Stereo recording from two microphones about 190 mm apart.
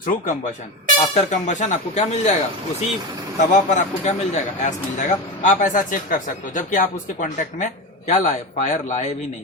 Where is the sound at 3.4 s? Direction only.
40° left (ahead or behind).